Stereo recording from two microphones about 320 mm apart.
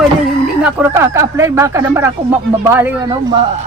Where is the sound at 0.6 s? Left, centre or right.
Centre.